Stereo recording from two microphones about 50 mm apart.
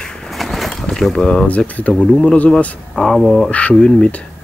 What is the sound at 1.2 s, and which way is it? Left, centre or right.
Speech, centre.